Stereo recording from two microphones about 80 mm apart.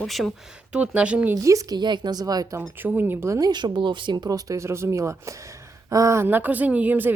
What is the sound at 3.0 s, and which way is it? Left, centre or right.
Speech, right.